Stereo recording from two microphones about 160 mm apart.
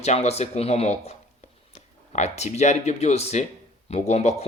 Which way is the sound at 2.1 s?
45° left (ahead or behind).